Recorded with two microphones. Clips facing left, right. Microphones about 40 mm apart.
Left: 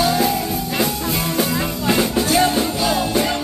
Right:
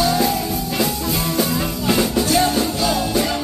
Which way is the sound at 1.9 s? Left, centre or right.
Centre.